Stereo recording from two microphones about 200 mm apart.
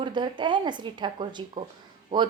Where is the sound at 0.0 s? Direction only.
25° right (ahead or behind).